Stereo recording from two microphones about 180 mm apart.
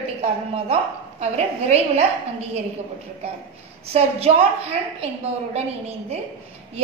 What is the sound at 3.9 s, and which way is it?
A woman's voice, 35° right (ahead or behind).